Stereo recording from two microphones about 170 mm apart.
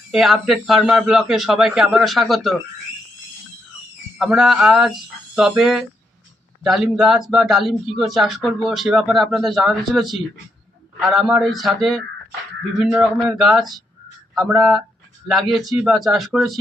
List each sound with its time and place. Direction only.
0.1 s speech: centre (ahead or behind)
4.2 s speech: centre (ahead or behind)